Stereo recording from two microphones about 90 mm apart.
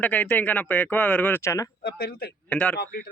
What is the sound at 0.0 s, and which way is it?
Speech, 15° left (ahead or behind).